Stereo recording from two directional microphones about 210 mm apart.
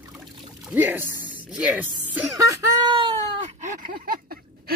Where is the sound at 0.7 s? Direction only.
10° right (ahead or behind).